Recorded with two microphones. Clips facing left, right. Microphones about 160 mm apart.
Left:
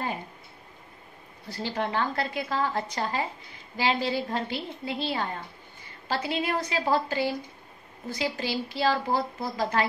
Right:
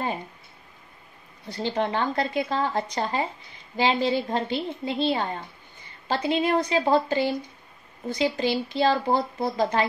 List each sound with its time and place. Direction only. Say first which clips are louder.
1.5 s speech: right 4 dB; 20° right (ahead or behind)